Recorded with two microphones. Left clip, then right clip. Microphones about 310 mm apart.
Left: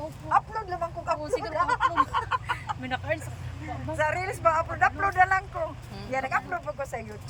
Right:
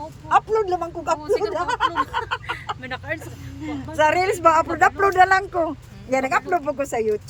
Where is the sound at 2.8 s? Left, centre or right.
Centre.